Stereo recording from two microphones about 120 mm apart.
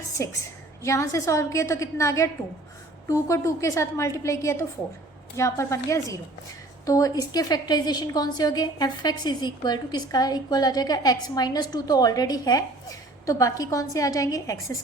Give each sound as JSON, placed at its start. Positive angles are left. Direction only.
{"t": 0.2, "sound": "a woman's voice", "side_deg": 25}